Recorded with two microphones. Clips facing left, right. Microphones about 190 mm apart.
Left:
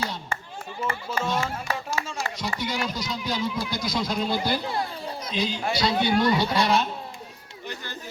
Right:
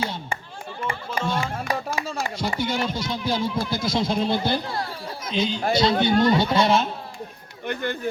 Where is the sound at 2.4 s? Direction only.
30° right (ahead or behind).